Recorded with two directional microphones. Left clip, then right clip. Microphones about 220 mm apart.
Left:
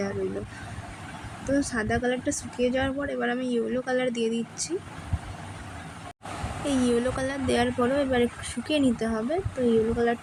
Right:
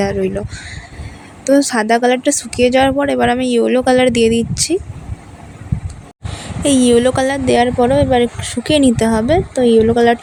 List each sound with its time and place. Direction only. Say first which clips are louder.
1.5 s speech: right 14 dB; 35° right (ahead or behind)
6.7 s speech: right 14 dB; 40° right (ahead or behind)